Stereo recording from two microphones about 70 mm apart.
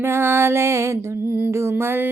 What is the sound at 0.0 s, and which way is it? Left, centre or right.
Music, right.